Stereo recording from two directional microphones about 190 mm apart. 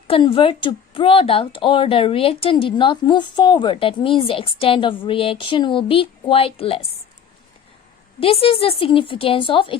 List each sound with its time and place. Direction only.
0.1 s speech: 30° left (ahead or behind)
8.2 s speech: 30° left (ahead or behind)